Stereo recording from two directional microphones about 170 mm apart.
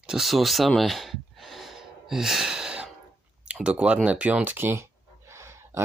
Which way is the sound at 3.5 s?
5° right (ahead or behind).